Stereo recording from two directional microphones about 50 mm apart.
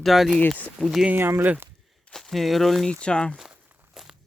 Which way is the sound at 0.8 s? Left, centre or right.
Centre.